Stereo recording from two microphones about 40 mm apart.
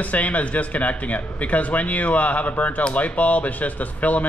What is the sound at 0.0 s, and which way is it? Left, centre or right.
Speech, left.